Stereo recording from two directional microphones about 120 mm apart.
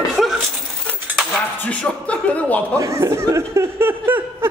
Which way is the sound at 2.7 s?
25° right (ahead or behind).